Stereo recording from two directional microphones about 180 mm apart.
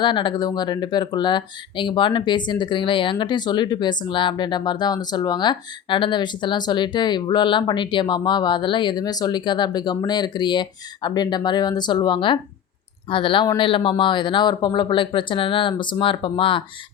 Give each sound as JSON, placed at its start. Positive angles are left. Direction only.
{"t": 0.0, "sound": "speech", "side_deg": 25}